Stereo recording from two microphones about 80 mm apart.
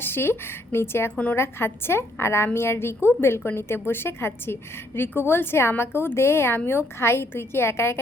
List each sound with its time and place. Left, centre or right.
0.0 s a woman's voice: left